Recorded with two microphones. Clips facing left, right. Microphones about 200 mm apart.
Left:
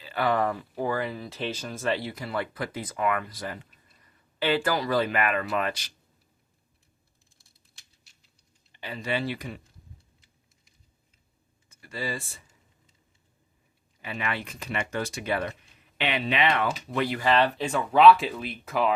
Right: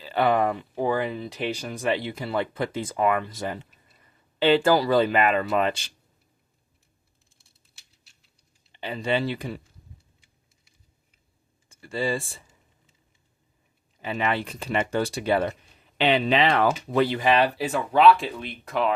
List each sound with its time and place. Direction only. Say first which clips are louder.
0.0 s speech: right 4 dB; 25° right (ahead or behind)
8.7 s speech: right 5 dB; 25° right (ahead or behind)
11.7 s speech: right 7 dB; 30° right (ahead or behind)
14.0 s speech: right 6 dB; 30° right (ahead or behind)
17.2 s speech: right 2 dB; 15° right (ahead or behind); by 18.9 s centre (ahead or behind)